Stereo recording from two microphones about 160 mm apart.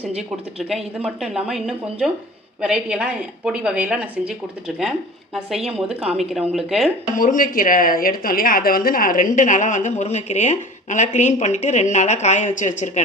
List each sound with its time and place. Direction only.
0.7 s a woman's voice: centre (ahead or behind)
7.2 s speech: 60° left (ahead or behind)